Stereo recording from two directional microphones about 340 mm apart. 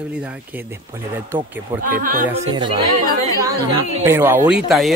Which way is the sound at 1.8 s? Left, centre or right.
Right.